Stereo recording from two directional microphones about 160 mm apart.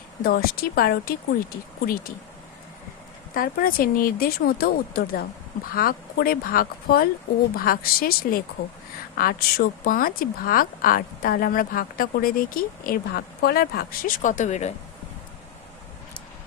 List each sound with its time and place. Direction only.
0.2 s speech: 70° left (ahead or behind)
3.3 s speech: 60° left (ahead or behind); by 14.7 s 45° left (ahead or behind)